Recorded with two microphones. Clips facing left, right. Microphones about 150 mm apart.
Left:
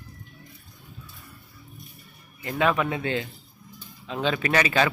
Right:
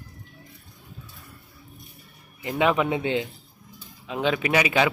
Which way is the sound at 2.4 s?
15° right (ahead or behind).